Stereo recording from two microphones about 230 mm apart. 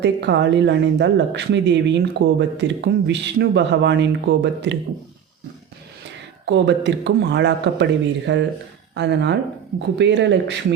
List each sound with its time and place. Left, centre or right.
0.0 s speech: right
6.4 s speech: right